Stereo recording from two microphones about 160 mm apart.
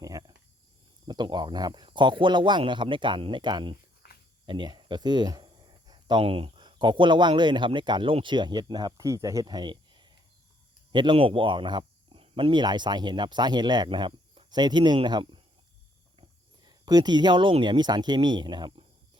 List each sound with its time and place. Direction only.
0.0 s cricket: 25° right (ahead or behind)
1.0 s speech: 30° right (ahead or behind)
16.6 s speech: 25° right (ahead or behind)